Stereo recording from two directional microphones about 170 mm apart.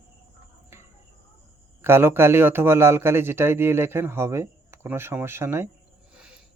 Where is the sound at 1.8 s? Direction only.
15° right (ahead or behind).